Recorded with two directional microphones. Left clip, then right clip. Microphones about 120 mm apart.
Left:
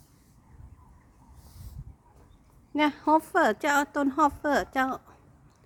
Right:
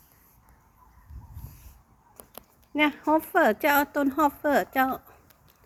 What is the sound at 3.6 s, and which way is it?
Speech, centre (ahead or behind).